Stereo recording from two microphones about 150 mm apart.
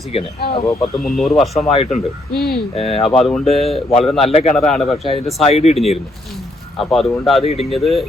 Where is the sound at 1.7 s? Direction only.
45° left (ahead or behind).